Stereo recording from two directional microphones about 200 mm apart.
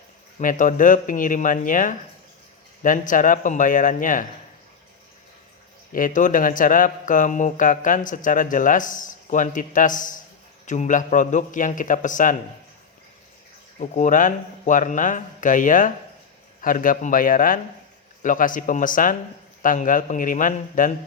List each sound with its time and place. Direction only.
0.3 s speech: 40° left (ahead or behind)
5.9 s speech: 40° left (ahead or behind)
13.7 s speech: 40° left (ahead or behind)